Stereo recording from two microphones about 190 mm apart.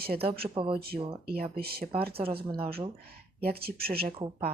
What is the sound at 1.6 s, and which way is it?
Speech, 55° right (ahead or behind).